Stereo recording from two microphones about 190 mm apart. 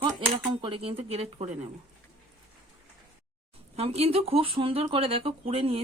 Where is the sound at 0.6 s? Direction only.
30° right (ahead or behind).